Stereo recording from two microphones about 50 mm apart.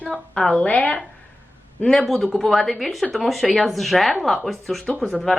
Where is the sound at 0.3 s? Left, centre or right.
Centre.